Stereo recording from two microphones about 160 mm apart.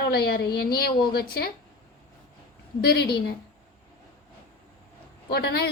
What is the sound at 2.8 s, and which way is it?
Speech, 90° left.